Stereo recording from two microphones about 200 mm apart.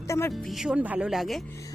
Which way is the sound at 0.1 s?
10° left (ahead or behind).